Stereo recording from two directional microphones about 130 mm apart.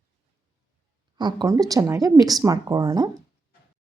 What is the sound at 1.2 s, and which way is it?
Speech, 30° right (ahead or behind).